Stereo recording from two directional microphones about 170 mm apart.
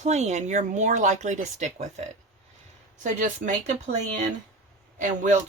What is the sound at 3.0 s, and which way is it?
Speech, 45° right (ahead or behind).